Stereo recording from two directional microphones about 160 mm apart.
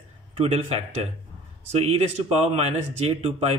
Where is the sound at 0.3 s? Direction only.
40° right (ahead or behind).